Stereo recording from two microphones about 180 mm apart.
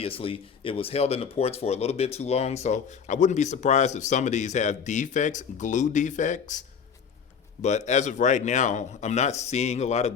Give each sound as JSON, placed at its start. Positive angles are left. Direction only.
{"t": 0.0, "sound": "speech", "side_deg": 30}